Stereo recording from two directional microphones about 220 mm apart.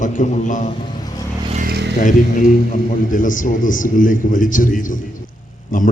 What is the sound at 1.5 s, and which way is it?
Vehicle, 45° right (ahead or behind).